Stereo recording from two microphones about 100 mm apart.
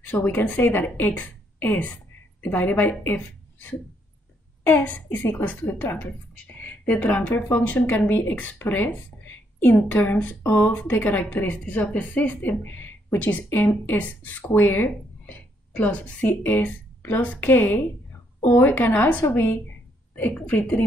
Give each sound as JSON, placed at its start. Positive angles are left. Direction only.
{"t": 0.0, "sound": "a woman's voice", "side_deg": 20}